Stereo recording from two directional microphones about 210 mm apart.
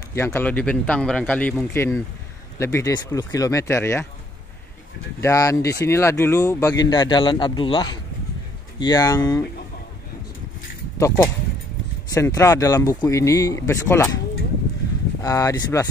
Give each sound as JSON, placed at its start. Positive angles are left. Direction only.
{"t": 0.1, "sound": "speech", "side_deg": 10}
{"t": 5.2, "sound": "speech", "side_deg": 15}
{"t": 11.0, "sound": "speech", "side_deg": 15}
{"t": 15.2, "sound": "speech", "side_deg": 15}